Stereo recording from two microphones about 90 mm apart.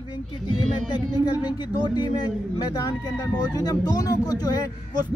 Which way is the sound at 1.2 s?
55° left (ahead or behind).